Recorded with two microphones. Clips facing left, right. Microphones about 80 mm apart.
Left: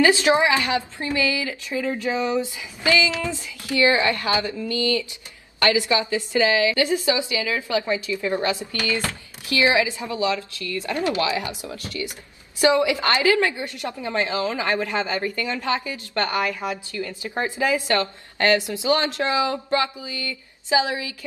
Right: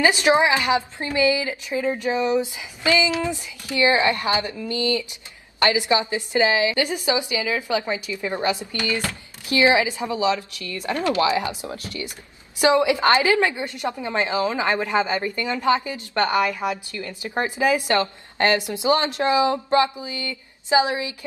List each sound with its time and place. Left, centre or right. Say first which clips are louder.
0.0 s a woman's voice: even; right